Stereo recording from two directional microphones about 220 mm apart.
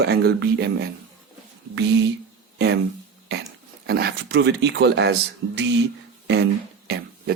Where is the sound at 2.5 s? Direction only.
45° right (ahead or behind).